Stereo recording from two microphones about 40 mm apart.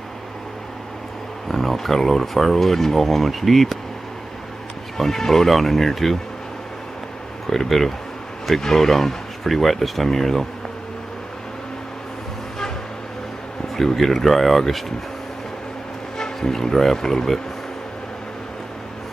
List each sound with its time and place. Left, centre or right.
1.5 s speech: centre
4.9 s speech: centre
7.4 s speech: centre
13.7 s speech: centre
16.3 s speech: centre